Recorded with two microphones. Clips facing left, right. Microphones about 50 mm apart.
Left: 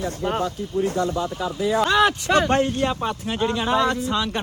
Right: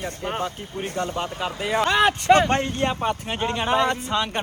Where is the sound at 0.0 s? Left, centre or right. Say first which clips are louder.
Left 3 dB; right.